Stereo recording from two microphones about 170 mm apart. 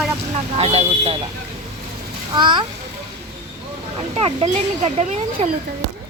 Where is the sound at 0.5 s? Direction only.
35° right (ahead or behind).